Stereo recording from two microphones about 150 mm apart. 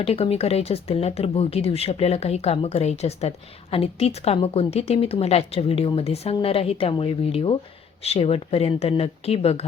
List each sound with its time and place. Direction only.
0.0 s speech: 40° left (ahead or behind)